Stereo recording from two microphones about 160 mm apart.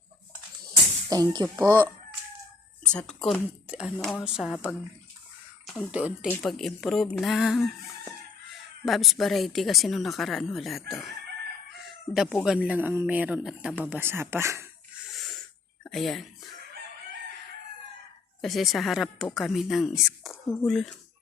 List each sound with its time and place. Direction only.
1.1 s speech: 25° right (ahead or behind)
2.8 s speech: 5° left (ahead or behind)
3.7 s speech: 5° right (ahead or behind)
5.6 s a sound: 5° left (ahead or behind)
5.9 s speech: 10° right (ahead or behind)
6.2 s speech: 5° left (ahead or behind)
8.8 s speech: centre (ahead or behind)
12.1 s speech: centre (ahead or behind); by 14.7 s 15° right (ahead or behind)
15.1 s snort: centre (ahead or behind)
15.8 s a sound: centre (ahead or behind)
18.4 s speech: centre (ahead or behind)